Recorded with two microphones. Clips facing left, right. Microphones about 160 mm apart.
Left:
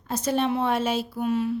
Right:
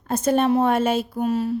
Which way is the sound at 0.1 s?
50° right (ahead or behind).